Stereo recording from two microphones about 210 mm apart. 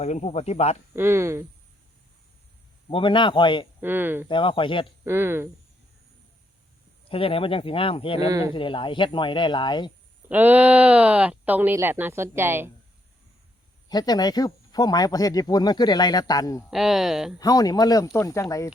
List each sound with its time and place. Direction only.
0.0 s speech: 30° left (ahead or behind)
0.9 s speech: 10° right (ahead or behind)
2.9 s speech: 25° left (ahead or behind)
3.8 s speech: 10° right (ahead or behind)
4.3 s speech: 25° left (ahead or behind)
5.0 s speech: 10° right (ahead or behind)
7.1 s speech: 25° left (ahead or behind)
8.3 s speech: 15° right (ahead or behind)
8.5 s speech: 25° left (ahead or behind)
10.2 s speech: 10° right (ahead or behind)
13.8 s speech: 20° left (ahead or behind)
16.6 s speech: centre (ahead or behind)
17.4 s speech: 15° left (ahead or behind)